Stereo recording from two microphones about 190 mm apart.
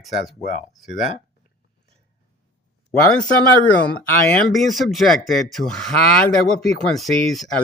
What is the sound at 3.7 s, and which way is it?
Speech, 5° left (ahead or behind).